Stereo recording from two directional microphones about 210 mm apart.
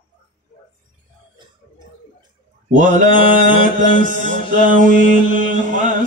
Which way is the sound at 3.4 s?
40° right (ahead or behind).